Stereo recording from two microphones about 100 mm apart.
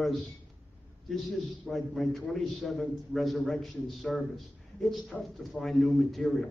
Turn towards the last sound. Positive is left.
turn(degrees=0)  # may be behind; listen again after turning